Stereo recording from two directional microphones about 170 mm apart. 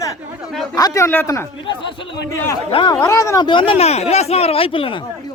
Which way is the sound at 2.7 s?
30° left (ahead or behind).